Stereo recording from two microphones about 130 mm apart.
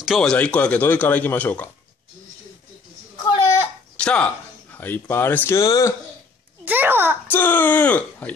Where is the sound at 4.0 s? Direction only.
10° left (ahead or behind).